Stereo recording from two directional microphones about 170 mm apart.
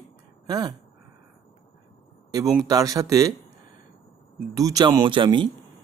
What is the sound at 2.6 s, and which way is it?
Speech, 20° right (ahead or behind).